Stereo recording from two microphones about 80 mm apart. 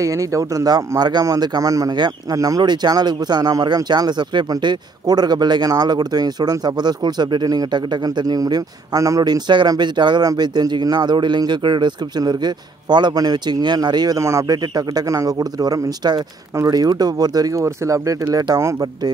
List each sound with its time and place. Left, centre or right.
0.0 s speech: right
2.6 s speech: right
9.2 s speech: right
10.2 s speech: right
12.2 s speech: right
14.2 s speech: right
17.6 s speech: right